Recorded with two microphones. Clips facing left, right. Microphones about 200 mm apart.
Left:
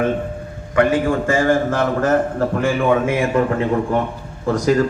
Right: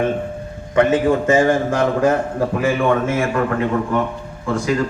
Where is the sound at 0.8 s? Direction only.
20° right (ahead or behind).